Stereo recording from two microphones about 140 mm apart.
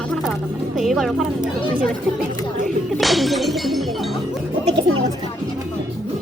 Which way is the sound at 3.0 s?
Centre (ahead or behind).